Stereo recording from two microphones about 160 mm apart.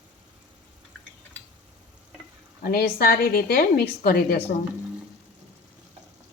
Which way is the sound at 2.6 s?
70° left (ahead or behind).